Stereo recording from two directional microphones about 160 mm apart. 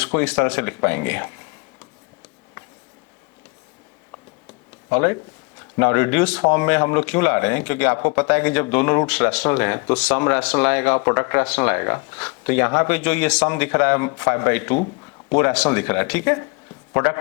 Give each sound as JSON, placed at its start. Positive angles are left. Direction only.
{"t": 0.0, "sound": "speech", "side_deg": 10}
{"t": 4.9, "sound": "a man's voice", "side_deg": 15}